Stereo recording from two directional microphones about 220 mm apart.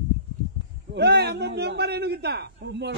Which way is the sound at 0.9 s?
50° right (ahead or behind).